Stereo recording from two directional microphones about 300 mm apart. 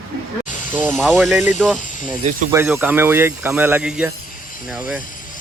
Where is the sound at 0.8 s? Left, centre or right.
Centre.